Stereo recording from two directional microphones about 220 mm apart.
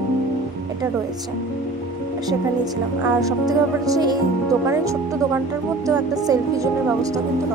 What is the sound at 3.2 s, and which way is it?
Speech, 15° right (ahead or behind).